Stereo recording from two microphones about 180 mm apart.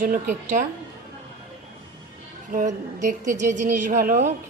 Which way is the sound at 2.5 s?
45° right (ahead or behind).